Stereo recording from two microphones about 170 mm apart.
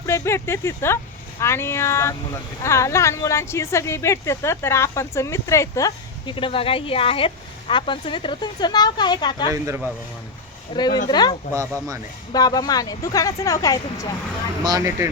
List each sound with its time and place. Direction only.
0.0 s speech: 15° left (ahead or behind)
6.3 s speech: 30° left (ahead or behind)
9.5 s speech: 15° right (ahead or behind)
10.8 s speech: 25° left (ahead or behind)
14.6 s speech: 20° right (ahead or behind)